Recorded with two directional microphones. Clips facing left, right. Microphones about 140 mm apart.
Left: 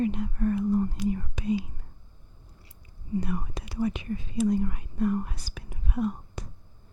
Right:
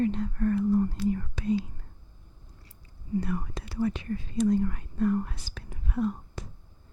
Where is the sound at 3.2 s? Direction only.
15° left (ahead or behind).